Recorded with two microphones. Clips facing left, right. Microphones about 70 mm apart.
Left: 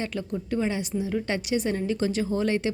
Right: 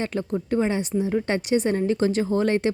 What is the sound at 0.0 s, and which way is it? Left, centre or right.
Speech, right.